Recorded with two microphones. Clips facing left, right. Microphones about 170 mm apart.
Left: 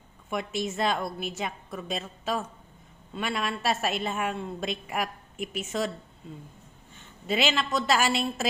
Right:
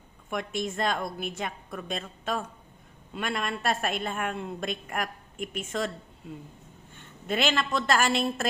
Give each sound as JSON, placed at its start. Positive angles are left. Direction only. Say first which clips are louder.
{"t": 0.3, "sound": "a woman's voice", "louder": "left 1 dB", "side_deg": 5}
{"t": 7.3, "sound": "a woman's voice", "louder": "even", "side_deg": 5}